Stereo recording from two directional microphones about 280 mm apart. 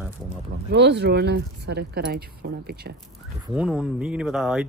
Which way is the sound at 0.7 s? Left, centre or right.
Right.